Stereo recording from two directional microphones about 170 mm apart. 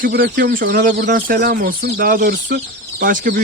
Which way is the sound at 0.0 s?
60° right (ahead or behind).